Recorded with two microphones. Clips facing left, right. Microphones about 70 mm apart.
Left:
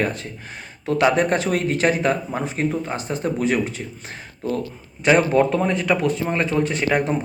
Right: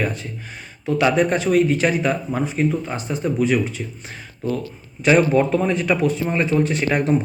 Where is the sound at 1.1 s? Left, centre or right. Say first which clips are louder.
Right 3 dB; left.